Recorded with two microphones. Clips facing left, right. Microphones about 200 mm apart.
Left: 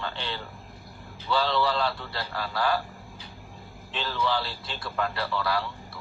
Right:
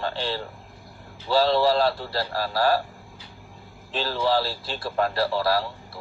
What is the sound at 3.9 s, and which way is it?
A man's voice, 35° right (ahead or behind).